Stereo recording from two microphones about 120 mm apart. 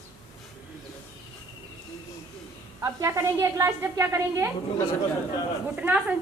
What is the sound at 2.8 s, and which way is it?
A woman's voice, 25° right (ahead or behind).